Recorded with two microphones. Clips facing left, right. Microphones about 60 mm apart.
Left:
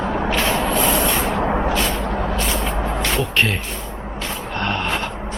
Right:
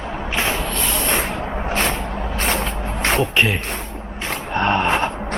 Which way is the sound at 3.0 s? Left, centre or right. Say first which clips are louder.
Right 5 dB; right.